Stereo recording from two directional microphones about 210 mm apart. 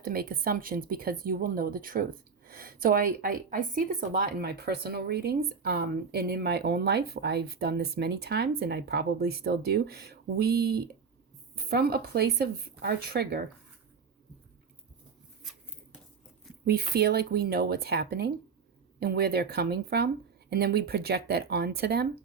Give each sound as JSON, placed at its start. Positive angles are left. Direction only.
{"t": 0.0, "sound": "speech", "side_deg": -45}
{"t": 16.6, "sound": "speech", "side_deg": -50}